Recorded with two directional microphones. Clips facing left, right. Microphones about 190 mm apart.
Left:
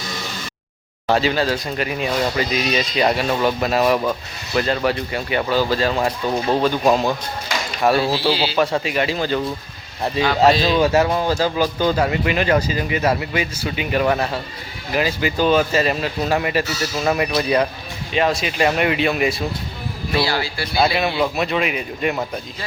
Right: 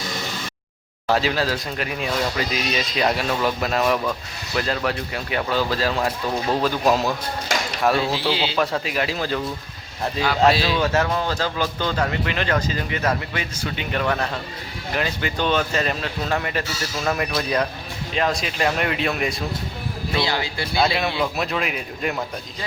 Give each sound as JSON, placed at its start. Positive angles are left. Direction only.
{"t": 1.0, "sound": "speech", "side_deg": 0}
{"t": 8.3, "sound": "speech", "side_deg": -20}
{"t": 8.5, "sound": "speech", "side_deg": 0}
{"t": 10.8, "sound": "speech", "side_deg": 10}
{"t": 20.2, "sound": "speech", "side_deg": -20}
{"t": 20.7, "sound": "speech", "side_deg": 0}